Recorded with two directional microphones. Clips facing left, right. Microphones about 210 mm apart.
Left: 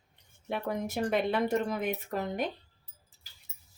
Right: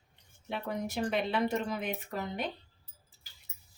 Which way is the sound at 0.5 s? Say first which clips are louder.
Left 2 dB; 50° left (ahead or behind).